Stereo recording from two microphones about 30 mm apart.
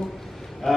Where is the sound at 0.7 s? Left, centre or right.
Centre.